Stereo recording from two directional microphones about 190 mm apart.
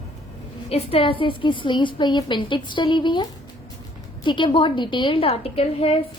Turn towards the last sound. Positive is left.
turn(degrees=30)  # may be behind; listen again after turning